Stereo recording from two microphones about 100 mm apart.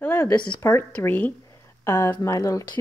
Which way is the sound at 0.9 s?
15° left (ahead or behind).